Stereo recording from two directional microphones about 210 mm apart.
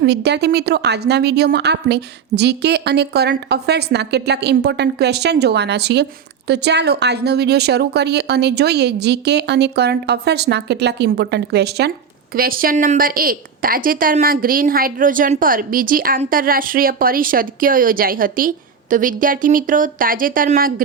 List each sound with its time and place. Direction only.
0.0 s a woman's voice: 50° right (ahead or behind)